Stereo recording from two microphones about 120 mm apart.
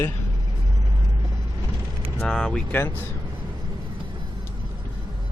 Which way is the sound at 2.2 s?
5° left (ahead or behind).